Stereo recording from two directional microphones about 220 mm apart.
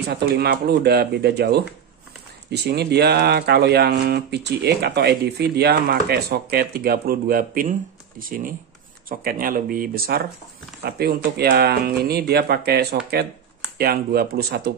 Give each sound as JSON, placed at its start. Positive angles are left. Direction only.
{"t": 0.1, "sound": "speech", "side_deg": -45}